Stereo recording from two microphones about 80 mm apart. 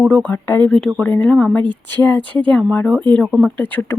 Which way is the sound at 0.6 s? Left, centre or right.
Centre.